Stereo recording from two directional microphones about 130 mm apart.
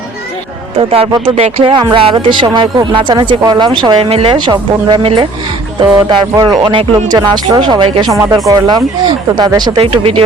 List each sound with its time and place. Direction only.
0.8 s speech: 45° right (ahead or behind)
5.8 s speech: 35° right (ahead or behind)